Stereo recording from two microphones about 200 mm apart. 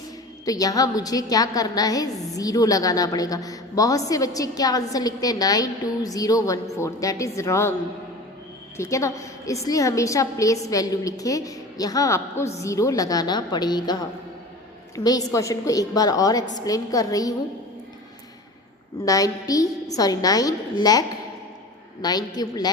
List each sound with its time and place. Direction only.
0.4 s a woman's voice: 15° left (ahead or behind)
8.8 s a woman's voice: 15° left (ahead or behind)
19.0 s a woman's voice: 15° left (ahead or behind)
22.0 s a woman's voice: 20° left (ahead or behind)